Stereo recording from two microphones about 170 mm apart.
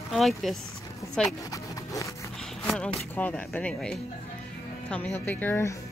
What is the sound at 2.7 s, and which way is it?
Speech, 5° left (ahead or behind).